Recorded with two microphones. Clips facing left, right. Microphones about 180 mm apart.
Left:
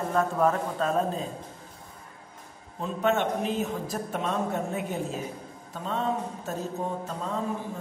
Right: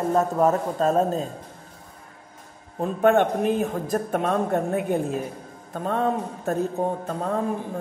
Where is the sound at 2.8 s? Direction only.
55° right (ahead or behind).